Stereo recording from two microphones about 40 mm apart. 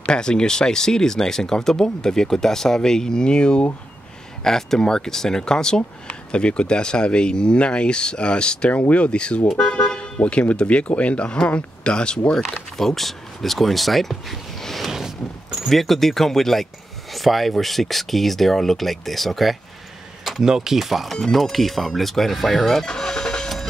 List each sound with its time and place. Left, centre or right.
0.0 s speech: left
4.4 s speech: centre; by 9.4 s left
9.5 s speech: centre
12.7 s speech: centre
14.9 s a sound: centre
15.7 s speech: centre
20.4 s speech: centre
22.8 s vehicle: centre